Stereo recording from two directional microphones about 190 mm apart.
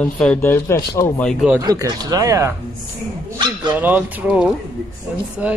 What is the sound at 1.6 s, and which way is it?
Speech, 20° right (ahead or behind).